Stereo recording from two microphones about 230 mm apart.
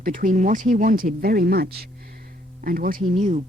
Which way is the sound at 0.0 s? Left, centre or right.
Right.